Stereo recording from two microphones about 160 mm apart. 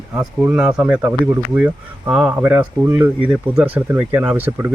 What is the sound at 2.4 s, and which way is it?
Speech, 10° right (ahead or behind).